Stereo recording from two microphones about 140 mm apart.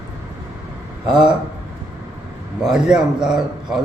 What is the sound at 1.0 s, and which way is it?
Speech, 35° right (ahead or behind).